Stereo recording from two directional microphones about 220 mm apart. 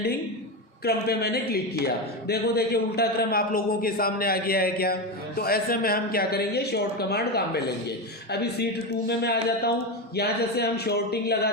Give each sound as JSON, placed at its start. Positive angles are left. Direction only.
{"t": 0.9, "sound": "speech", "side_deg": 45}